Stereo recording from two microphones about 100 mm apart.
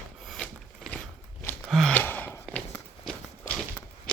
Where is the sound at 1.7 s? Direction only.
5° left (ahead or behind).